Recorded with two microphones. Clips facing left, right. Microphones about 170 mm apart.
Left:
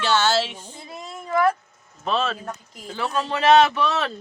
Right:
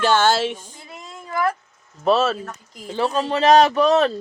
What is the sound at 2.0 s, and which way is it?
Speech, 45° right (ahead or behind).